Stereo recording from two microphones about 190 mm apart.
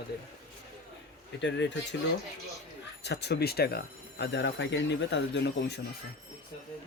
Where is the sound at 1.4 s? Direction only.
70° left (ahead or behind).